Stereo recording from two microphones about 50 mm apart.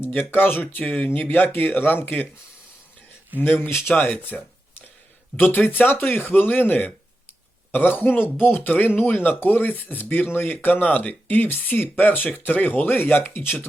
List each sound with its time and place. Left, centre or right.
0.1 s speech: left
3.4 s speech: left
3.9 s speech: left
5.4 s speech: left